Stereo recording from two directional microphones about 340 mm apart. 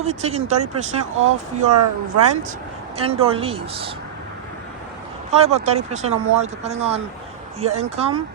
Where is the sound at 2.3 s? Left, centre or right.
Right.